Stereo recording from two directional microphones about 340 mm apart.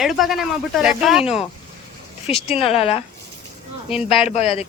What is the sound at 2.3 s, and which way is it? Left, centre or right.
Speech, centre.